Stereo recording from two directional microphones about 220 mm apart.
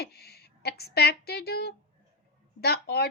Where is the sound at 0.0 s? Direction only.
45° left (ahead or behind).